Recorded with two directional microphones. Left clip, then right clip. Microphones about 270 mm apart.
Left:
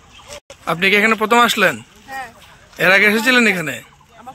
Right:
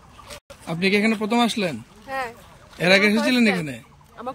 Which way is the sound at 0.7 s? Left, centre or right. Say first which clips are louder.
Left 7 dB; centre.